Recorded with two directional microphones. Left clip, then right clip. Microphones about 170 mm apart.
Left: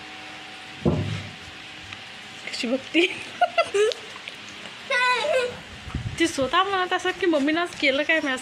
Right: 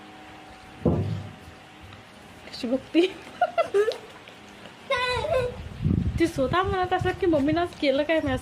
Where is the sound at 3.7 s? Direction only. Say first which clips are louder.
Left 2 dB; 40° right (ahead or behind).